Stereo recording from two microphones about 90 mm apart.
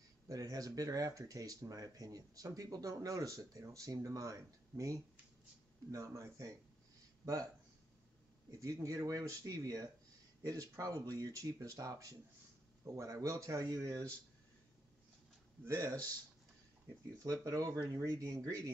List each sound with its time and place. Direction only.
0.3 s speech: 40° right (ahead or behind)
8.5 s speech: 40° right (ahead or behind)
15.6 s speech: 35° right (ahead or behind)
17.2 s speech: 35° right (ahead or behind)